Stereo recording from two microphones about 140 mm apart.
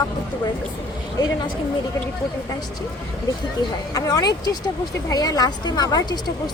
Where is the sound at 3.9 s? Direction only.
30° left (ahead or behind).